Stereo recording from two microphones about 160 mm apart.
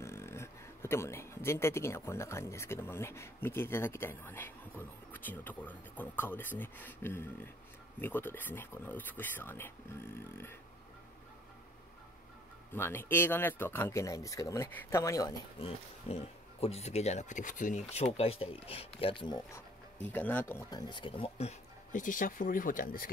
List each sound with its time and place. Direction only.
0.0 s speech: 15° left (ahead or behind)
12.7 s speech: 15° left (ahead or behind)
15.6 s speech: 40° left (ahead or behind)
20.0 s speech: 10° left (ahead or behind)
20.7 s speech: 30° left (ahead or behind); by 23.0 s 60° left (ahead or behind)